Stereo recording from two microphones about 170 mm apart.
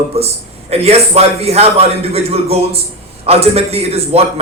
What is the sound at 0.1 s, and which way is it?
A man's voice, 40° right (ahead or behind).